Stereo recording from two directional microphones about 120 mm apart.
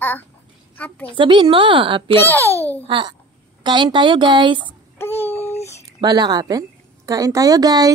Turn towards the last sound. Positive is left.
turn(degrees=-35)  # may be behind; listen again after turning